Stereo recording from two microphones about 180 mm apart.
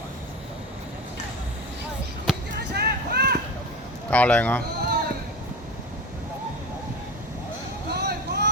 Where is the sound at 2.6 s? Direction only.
70° right (ahead or behind).